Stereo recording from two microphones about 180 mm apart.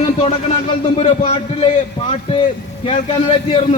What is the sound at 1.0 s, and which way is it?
Speech, 35° left (ahead or behind).